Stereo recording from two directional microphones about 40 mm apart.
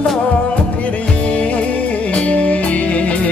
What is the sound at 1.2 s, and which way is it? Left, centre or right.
Music, left.